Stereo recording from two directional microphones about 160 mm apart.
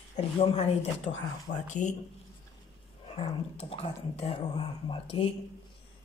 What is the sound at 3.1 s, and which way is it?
Speech, 35° left (ahead or behind).